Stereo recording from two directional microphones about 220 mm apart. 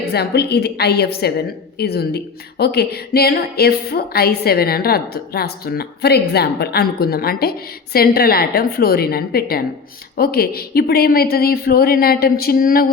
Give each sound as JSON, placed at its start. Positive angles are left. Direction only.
{"t": 0.0, "sound": "a woman's voice", "side_deg": 45}